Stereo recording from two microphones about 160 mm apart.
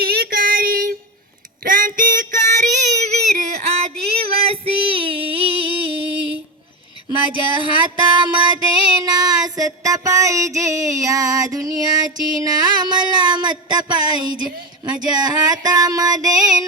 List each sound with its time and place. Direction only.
0.0 s child singing: 75° right (ahead or behind); by 5.9 s 35° right (ahead or behind)
7.1 s music: 30° right (ahead or behind)
12.5 s a sound: 25° right (ahead or behind)